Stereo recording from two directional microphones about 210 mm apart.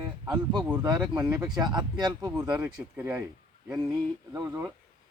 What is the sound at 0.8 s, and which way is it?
Speech, 20° right (ahead or behind).